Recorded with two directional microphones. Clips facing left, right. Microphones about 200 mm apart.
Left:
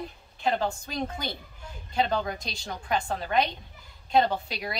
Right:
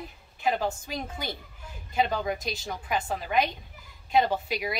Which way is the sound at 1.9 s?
5° right (ahead or behind).